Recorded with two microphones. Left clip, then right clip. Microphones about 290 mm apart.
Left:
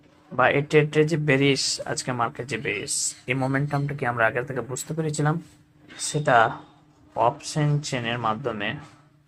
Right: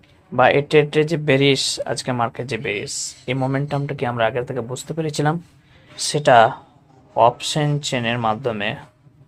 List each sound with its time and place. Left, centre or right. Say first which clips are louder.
0.3 s speech: right 5 dB; right